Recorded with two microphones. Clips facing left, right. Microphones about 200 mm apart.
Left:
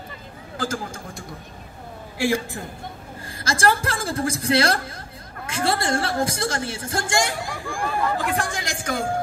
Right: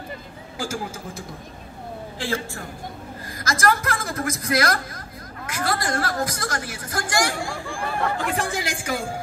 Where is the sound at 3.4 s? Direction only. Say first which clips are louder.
Left 1 dB; 30° left (ahead or behind).